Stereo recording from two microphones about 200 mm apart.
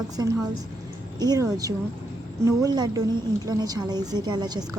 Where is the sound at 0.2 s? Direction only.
20° right (ahead or behind).